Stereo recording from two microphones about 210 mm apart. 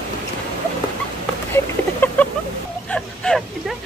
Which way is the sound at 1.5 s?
10° left (ahead or behind).